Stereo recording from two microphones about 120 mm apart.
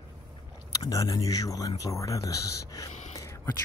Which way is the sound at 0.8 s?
30° left (ahead or behind).